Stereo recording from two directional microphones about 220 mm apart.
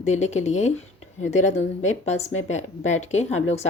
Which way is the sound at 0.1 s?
30° left (ahead or behind).